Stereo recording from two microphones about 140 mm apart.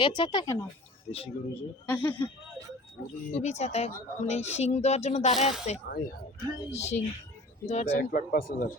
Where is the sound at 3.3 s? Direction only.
55° left (ahead or behind).